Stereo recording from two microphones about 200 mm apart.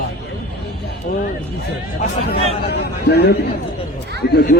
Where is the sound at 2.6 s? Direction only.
55° left (ahead or behind).